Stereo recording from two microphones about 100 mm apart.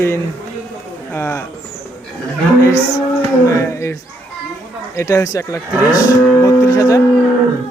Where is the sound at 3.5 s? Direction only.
30° left (ahead or behind).